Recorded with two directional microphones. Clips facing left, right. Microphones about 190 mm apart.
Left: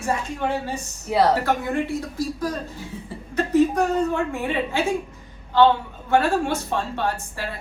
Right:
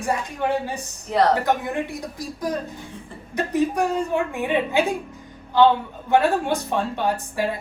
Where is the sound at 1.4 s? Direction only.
15° right (ahead or behind).